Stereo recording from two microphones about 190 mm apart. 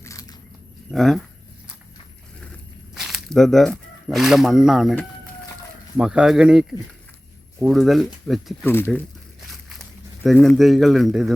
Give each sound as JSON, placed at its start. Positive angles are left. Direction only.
{"t": 0.0, "sound": "biting", "side_deg": 15}
{"t": 0.9, "sound": "speech", "side_deg": 0}
{"t": 2.9, "sound": "speech", "side_deg": 0}
{"t": 6.0, "sound": "speech", "side_deg": -5}
{"t": 8.6, "sound": "speech", "side_deg": 10}
{"t": 9.5, "sound": "walk", "side_deg": 0}
{"t": 10.2, "sound": "speech", "side_deg": 5}